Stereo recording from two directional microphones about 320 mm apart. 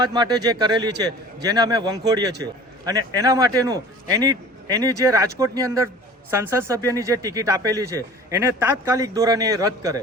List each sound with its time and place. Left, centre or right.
0.0 s speech: centre